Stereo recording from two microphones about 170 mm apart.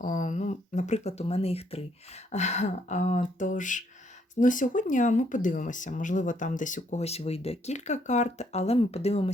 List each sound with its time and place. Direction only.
0.0 s speech: 45° left (ahead or behind)